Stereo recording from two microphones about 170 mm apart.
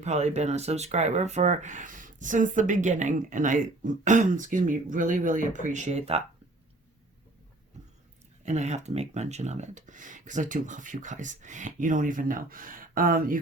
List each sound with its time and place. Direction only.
0.0 s speech: 40° right (ahead or behind)
8.4 s speech: 40° right (ahead or behind)